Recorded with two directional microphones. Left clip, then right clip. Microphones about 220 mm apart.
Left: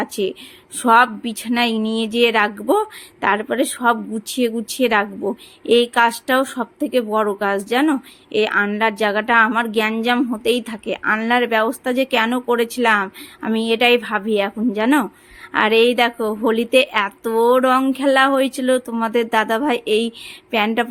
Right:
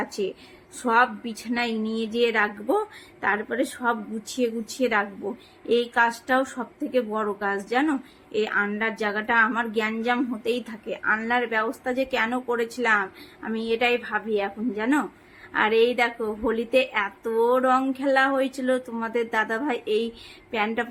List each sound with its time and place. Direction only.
0.0 s a woman's voice: 45° left (ahead or behind)